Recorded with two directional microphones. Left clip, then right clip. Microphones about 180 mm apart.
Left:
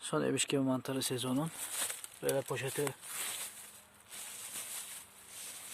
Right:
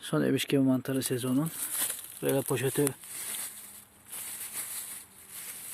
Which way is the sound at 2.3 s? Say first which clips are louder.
Right 6 dB; 30° right (ahead or behind).